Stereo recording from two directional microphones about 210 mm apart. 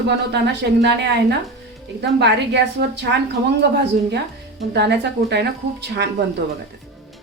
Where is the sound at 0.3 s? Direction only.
55° right (ahead or behind).